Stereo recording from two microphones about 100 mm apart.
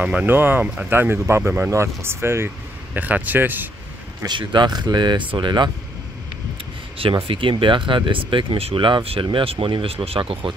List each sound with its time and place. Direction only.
0.0 s speech: 15° right (ahead or behind)
4.3 s speech: 50° right (ahead or behind)
7.0 s speech: 60° right (ahead or behind)